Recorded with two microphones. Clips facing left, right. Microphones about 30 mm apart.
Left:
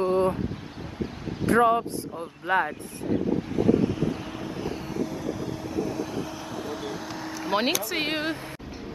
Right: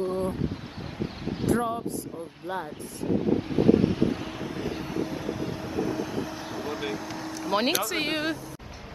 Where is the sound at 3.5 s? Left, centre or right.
Right.